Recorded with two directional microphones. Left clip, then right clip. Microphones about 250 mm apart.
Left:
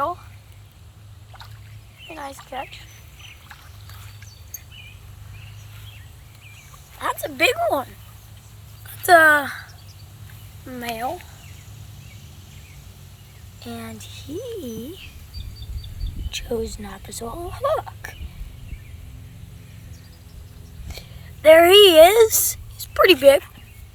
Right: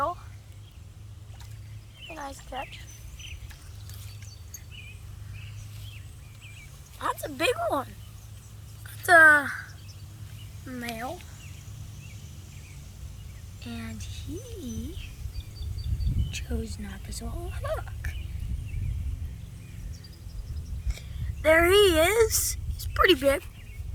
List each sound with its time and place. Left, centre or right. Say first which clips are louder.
0.0 s a sound: left 5 dB; right
2.0 s a sound: left 5 dB; right
7.0 s speech: left 7 dB; right
9.0 s speech: left 3 dB; centre
10.7 s speech: left 8 dB; centre
13.6 s speech: left 6 dB; centre
16.3 s speech: left 12 dB; centre
20.8 s speech: left 6 dB; centre